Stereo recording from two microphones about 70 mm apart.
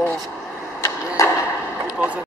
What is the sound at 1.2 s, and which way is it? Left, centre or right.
Arrow, left.